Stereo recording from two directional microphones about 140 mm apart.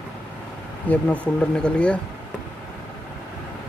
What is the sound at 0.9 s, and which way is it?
Speech, 10° left (ahead or behind).